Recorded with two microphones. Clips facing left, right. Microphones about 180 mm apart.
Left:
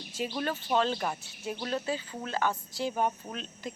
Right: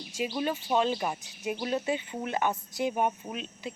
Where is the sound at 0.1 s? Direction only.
10° right (ahead or behind).